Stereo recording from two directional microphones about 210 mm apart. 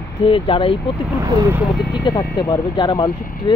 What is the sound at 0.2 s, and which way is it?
Speech, 25° left (ahead or behind).